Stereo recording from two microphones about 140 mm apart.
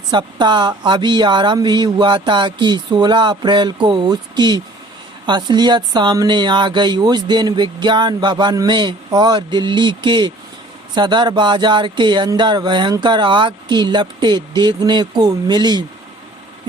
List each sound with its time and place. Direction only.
0.1 s speech: 30° right (ahead or behind)